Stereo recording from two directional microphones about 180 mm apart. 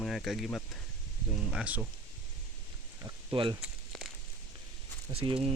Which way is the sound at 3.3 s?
30° right (ahead or behind).